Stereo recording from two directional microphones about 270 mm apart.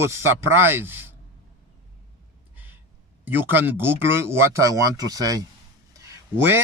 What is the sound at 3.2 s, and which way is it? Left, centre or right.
Speech, centre.